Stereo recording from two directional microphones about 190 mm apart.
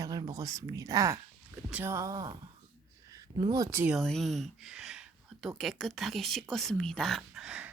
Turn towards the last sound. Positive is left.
turn(degrees=-5)  # may be behind; listen again after turning